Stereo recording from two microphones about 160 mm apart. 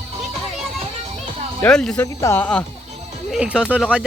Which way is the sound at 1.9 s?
15° left (ahead or behind).